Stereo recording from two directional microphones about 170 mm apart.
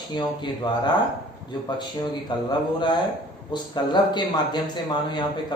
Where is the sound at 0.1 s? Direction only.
25° left (ahead or behind).